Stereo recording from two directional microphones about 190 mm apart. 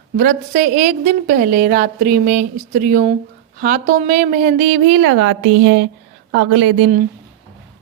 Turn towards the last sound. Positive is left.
turn(degrees=-90)